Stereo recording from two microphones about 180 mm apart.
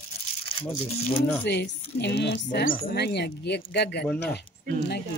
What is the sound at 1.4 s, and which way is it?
Speech, 70° left (ahead or behind).